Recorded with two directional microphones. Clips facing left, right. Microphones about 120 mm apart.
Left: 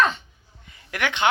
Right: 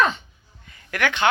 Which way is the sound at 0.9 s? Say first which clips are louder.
Right 1 dB; 20° left (ahead or behind).